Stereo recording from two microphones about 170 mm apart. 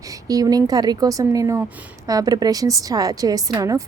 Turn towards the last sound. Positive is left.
turn(degrees=-20)  # may be behind; listen again after turning